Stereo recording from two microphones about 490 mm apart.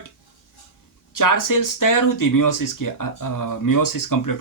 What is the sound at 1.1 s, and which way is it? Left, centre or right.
Speech, left.